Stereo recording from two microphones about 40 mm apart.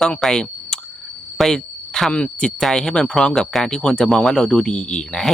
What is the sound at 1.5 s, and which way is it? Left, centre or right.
Speech, centre.